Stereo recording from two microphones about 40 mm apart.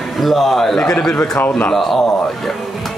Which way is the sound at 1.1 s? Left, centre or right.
Left.